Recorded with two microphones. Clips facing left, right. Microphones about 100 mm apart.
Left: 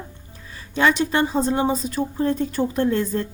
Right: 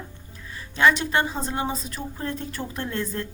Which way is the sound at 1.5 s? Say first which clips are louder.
Left 7 dB; 30° left (ahead or behind).